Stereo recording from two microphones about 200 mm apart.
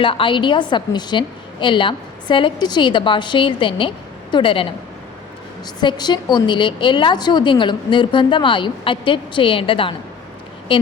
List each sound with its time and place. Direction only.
0.0 s a woman's voice: 25° left (ahead or behind)
5.8 s a woman's voice: 20° left (ahead or behind)